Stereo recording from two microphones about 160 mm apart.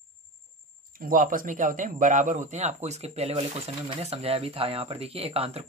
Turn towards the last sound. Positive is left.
turn(degrees=-40)  # may be behind; listen again after turning